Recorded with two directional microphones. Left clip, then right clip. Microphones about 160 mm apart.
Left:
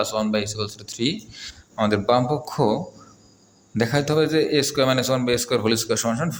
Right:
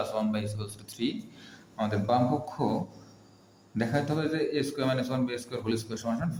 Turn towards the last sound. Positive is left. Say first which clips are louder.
# left 11 dB
turn(degrees=55)  # may be behind; listen again after turning